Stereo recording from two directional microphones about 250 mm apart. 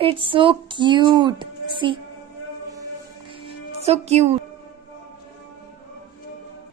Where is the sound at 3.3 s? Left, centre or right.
Right.